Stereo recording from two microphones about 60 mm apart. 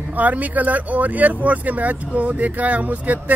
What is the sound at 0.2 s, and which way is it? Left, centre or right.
Speech, right.